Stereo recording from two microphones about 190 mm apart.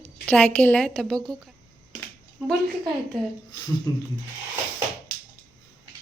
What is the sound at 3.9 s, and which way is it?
Speech, 20° left (ahead or behind).